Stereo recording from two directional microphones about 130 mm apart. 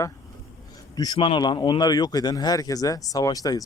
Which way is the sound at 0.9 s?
35° left (ahead or behind).